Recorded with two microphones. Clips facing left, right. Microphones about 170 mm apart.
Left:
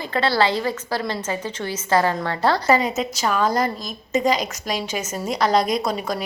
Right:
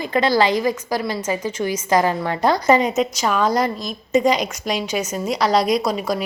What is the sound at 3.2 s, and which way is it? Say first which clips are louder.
Speech: left 1 dB; 5° right (ahead or behind).